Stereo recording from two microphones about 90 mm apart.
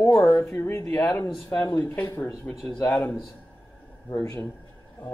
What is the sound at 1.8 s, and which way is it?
Speech, 25° left (ahead or behind).